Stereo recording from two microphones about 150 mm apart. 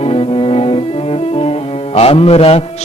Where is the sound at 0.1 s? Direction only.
40° left (ahead or behind).